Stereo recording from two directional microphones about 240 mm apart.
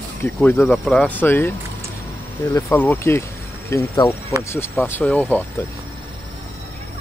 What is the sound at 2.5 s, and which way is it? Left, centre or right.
Speech, centre.